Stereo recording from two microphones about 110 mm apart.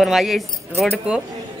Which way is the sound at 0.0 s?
Centre (ahead or behind).